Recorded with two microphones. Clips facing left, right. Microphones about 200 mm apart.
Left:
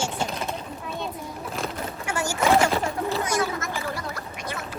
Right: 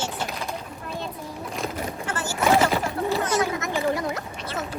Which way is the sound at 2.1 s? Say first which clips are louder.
Left 5 dB; 15° left (ahead or behind).